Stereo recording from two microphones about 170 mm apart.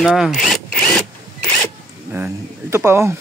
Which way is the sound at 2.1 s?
15° right (ahead or behind).